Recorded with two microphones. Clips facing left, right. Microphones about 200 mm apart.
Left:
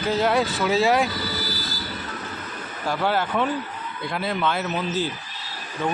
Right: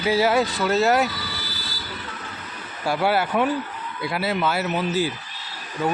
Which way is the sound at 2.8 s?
10° right (ahead or behind).